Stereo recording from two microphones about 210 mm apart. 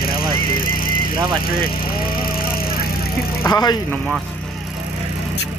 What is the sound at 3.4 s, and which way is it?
Speech, 20° left (ahead or behind).